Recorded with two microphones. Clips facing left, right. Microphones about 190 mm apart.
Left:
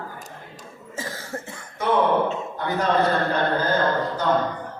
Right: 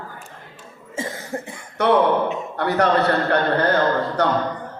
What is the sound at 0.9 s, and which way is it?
Cough, 25° right (ahead or behind).